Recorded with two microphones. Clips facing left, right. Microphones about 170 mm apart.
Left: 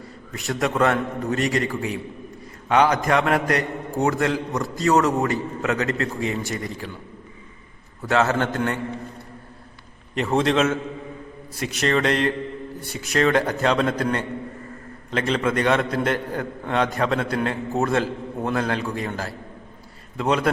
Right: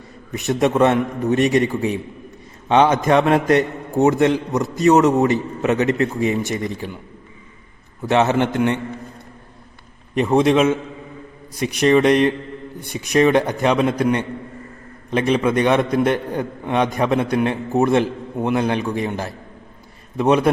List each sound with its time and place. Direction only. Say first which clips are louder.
0.3 s a man's voice: right 6 dB; 20° right (ahead or behind)
8.0 s a man's voice: right 4 dB; 20° right (ahead or behind)
10.2 s a man's voice: right 5 dB; 15° right (ahead or behind)